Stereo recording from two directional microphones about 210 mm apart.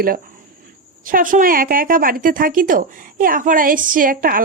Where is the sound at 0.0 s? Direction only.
40° right (ahead or behind).